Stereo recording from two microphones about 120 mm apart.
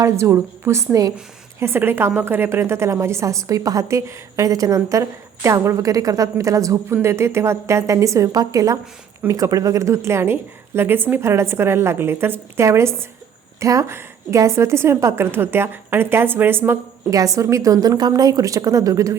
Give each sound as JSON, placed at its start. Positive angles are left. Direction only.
{"t": 0.0, "sound": "a woman's voice", "side_deg": -25}